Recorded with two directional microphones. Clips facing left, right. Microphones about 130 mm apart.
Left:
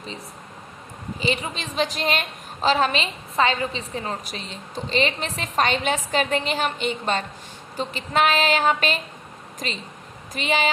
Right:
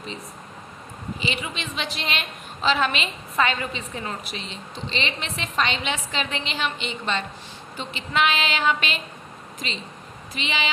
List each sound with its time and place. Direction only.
1.2 s a woman's voice: 40° left (ahead or behind)